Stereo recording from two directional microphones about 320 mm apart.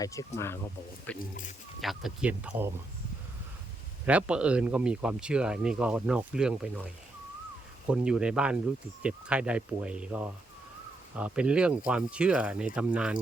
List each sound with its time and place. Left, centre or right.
0.0 s speech: centre
4.0 s speech: centre